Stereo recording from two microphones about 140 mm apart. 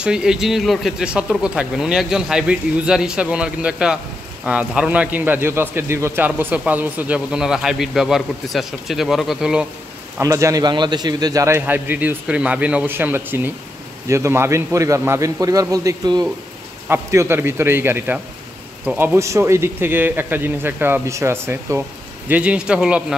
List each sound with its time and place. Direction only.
0.0 s a man's voice: 5° right (ahead or behind)
10.1 s a man's voice: 20° right (ahead or behind); by 23.1 s 5° right (ahead or behind)